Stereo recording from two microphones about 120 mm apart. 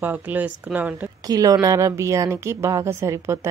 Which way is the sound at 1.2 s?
30° right (ahead or behind).